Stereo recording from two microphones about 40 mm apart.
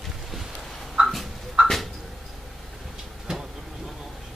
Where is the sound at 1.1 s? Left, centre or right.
Centre.